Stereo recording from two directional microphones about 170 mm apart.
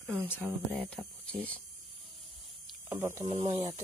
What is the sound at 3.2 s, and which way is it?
Speech, 40° right (ahead or behind).